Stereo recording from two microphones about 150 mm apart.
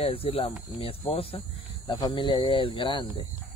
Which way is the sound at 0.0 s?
40° left (ahead or behind).